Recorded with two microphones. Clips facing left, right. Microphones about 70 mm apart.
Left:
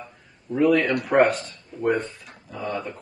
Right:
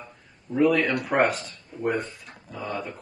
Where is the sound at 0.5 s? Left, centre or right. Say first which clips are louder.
Left 2 dB; centre.